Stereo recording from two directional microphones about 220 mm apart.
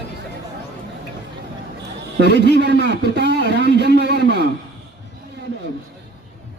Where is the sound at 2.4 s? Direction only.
50° right (ahead or behind).